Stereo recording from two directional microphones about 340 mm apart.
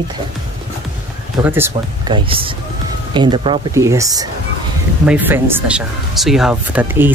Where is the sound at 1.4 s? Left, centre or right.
Centre.